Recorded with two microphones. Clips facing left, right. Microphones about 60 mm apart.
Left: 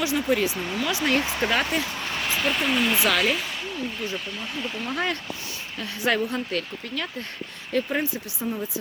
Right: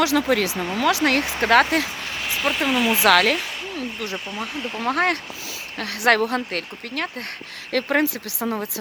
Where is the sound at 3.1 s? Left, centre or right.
Right.